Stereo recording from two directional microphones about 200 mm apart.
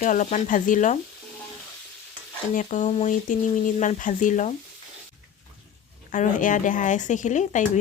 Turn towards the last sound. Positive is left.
turn(degrees=35)  # may be behind; listen again after turning